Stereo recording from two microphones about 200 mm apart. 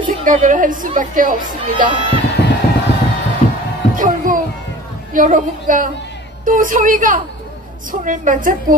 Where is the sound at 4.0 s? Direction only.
40° right (ahead or behind).